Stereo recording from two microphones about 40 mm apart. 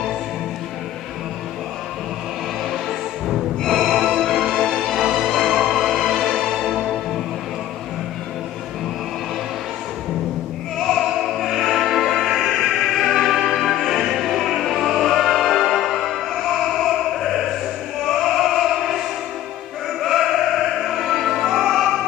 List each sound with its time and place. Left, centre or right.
2.7 s music: centre
10.9 s opera: centre
12.4 s music: centre
18.0 s opera: centre
20.0 s music: centre